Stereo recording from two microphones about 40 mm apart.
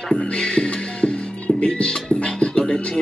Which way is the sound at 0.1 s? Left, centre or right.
Left.